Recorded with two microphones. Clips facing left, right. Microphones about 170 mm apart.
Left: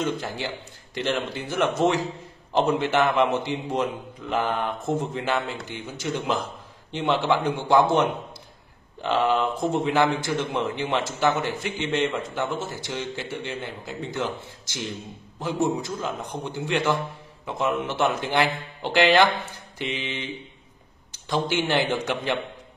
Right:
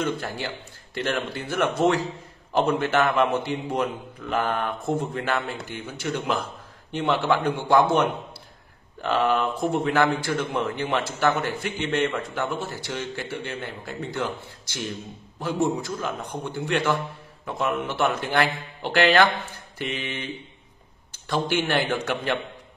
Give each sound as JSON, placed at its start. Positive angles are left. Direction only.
{"t": 0.0, "sound": "a man's voice", "side_deg": 15}
{"t": 9.0, "sound": "a man's voice", "side_deg": 15}
{"t": 21.3, "sound": "a man's voice", "side_deg": 15}